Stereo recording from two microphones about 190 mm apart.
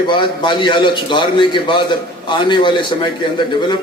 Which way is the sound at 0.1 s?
25° left (ahead or behind).